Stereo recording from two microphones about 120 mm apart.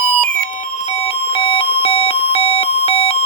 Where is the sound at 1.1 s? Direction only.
50° left (ahead or behind).